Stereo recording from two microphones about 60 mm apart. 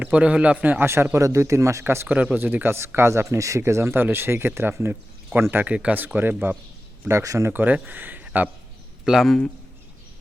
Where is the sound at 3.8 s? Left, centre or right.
Right.